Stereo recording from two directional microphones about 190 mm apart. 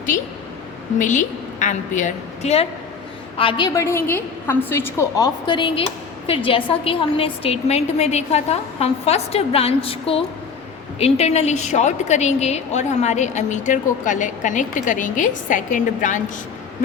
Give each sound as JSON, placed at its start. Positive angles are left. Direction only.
{"t": 0.9, "sound": "a woman's voice", "side_deg": 40}
{"t": 3.8, "sound": "a woman's voice", "side_deg": 15}